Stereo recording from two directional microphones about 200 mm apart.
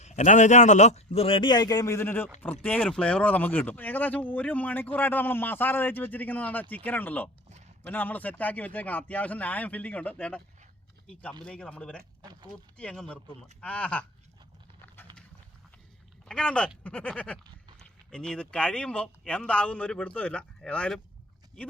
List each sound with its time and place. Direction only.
0.0 s speech: 35° left (ahead or behind); by 12.0 s 5° left (ahead or behind)
12.2 s speech: 20° right (ahead or behind)
12.5 s speech: 5° left (ahead or behind)
16.3 s speech: 5° left (ahead or behind)